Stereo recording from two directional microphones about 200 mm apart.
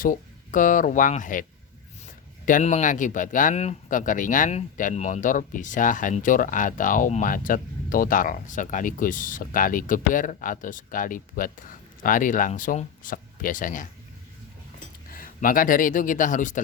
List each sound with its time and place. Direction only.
0.0 s speech: 40° left (ahead or behind)
2.5 s speech: 35° left (ahead or behind)